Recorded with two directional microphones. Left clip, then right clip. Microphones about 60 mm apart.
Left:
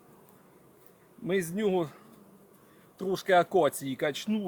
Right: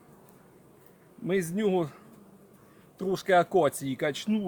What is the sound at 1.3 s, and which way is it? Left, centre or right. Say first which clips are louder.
Speech: right 1 dB; left.